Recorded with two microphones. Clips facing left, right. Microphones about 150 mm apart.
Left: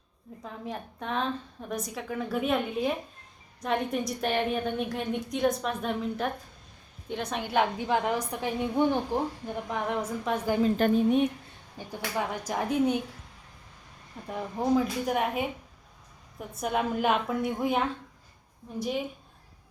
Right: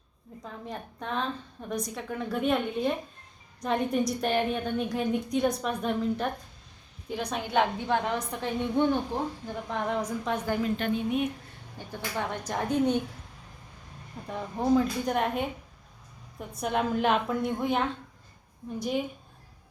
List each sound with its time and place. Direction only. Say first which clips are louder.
0.4 s a woman's voice: left 1 dB; centre (ahead or behind)
10.6 s a woman's voice: left 5 dB; 40° left (ahead or behind)
11.8 s a woman's voice: left 1 dB; 10° left (ahead or behind)
14.3 s a woman's voice: right 1 dB; 5° left (ahead or behind)
16.6 s a woman's voice: right 1 dB; centre (ahead or behind)